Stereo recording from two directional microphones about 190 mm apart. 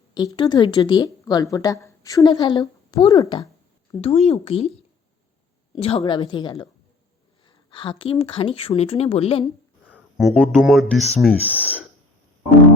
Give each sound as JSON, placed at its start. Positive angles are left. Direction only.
{"t": 0.1, "sound": "a woman's voice", "side_deg": 20}
{"t": 4.0, "sound": "speech", "side_deg": 35}
{"t": 5.7, "sound": "a woman's voice", "side_deg": 30}
{"t": 9.9, "sound": "a sound", "side_deg": 0}
{"t": 10.6, "sound": "speech", "side_deg": 0}